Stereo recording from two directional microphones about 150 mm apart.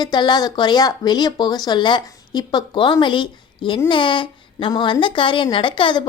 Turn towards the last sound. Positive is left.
turn(degrees=35)  # may be behind; listen again after turning